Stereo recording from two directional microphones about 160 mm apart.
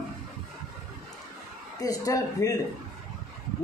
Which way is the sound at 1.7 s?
20° left (ahead or behind).